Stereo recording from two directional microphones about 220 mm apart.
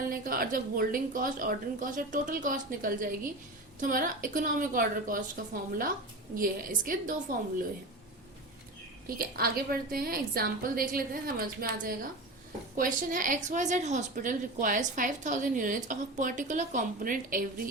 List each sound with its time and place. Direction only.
0.0 s a woman's voice: 40° right (ahead or behind)
6.3 s a woman's voice: 40° right (ahead or behind)
9.0 s a woman's voice: 45° right (ahead or behind)